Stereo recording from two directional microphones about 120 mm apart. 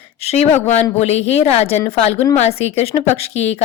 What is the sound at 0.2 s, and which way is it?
A woman's voice, 60° left (ahead or behind).